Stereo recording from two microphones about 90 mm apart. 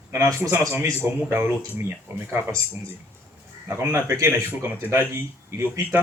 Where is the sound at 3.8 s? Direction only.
30° right (ahead or behind).